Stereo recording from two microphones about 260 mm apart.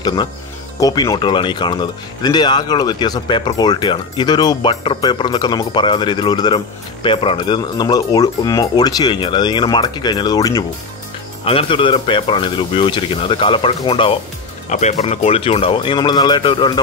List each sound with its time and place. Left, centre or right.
0.0 s speech: centre